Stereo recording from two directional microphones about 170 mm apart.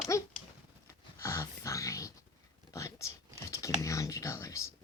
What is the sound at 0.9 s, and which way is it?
Dog, 20° left (ahead or behind).